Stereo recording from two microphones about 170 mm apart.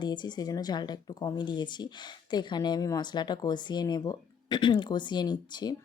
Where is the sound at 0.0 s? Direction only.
25° left (ahead or behind).